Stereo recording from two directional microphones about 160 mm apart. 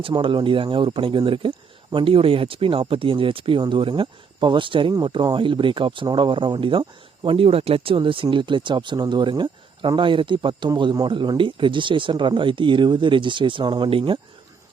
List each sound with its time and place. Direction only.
0.0 s speech: 30° right (ahead or behind)